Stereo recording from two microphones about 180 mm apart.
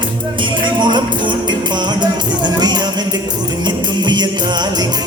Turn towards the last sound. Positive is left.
turn(degrees=-25)  # may be behind; listen again after turning